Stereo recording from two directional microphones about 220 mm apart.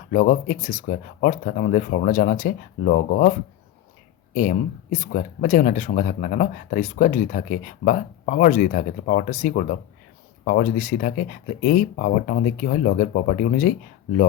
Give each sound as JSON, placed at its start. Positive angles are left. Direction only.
{"t": 0.1, "sound": "speech", "side_deg": 35}
{"t": 4.4, "sound": "speech", "side_deg": 35}